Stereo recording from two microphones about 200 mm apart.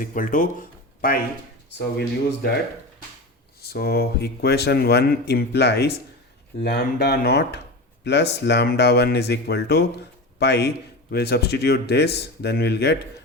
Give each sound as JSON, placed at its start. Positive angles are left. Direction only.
{"t": 0.0, "sound": "speech", "side_deg": 45}
{"t": 1.8, "sound": "speech", "side_deg": 55}
{"t": 3.6, "sound": "speech", "side_deg": 50}